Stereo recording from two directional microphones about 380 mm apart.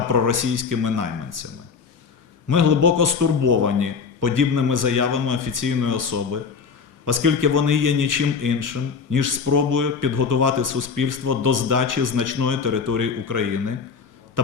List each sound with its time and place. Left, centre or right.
0.1 s a man's voice: right
2.5 s a man's voice: right